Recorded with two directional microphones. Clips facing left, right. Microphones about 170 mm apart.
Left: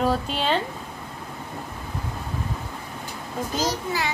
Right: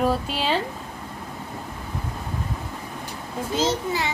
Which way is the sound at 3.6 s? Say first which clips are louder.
Right 3 dB; 25° right (ahead or behind).